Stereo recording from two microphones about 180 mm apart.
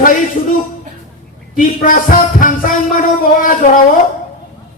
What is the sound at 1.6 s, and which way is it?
Music, 50° left (ahead or behind).